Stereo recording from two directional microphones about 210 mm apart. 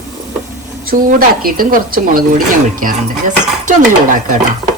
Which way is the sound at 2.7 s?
40° right (ahead or behind).